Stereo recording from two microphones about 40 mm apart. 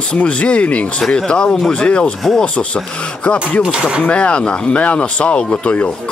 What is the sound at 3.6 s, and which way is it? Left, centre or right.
Speech, centre.